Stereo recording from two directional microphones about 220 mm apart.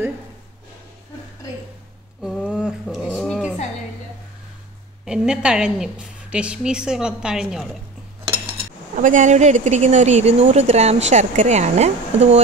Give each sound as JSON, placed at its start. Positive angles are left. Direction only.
{"t": 2.2, "sound": "dog", "side_deg": 0}
{"t": 5.0, "sound": "a woman's voice", "side_deg": -5}
{"t": 8.5, "sound": "speech", "side_deg": -35}